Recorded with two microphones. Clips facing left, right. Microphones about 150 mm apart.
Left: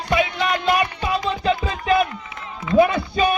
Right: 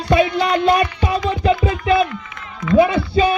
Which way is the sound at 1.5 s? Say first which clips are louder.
Right 3 dB; 30° left (ahead or behind).